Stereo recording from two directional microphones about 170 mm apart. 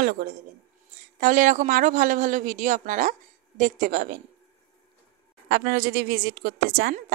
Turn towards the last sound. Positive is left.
turn(degrees=-60)  # may be behind; listen again after turning